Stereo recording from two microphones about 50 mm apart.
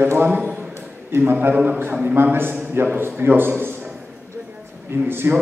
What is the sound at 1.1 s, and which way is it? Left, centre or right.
Speech, right.